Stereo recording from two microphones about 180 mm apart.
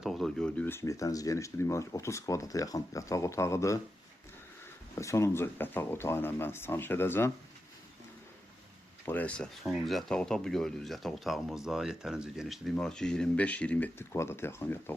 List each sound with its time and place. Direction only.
0.0 s speech: centre (ahead or behind)
4.9 s speech: 15° left (ahead or behind)
9.0 s speech: 10° left (ahead or behind)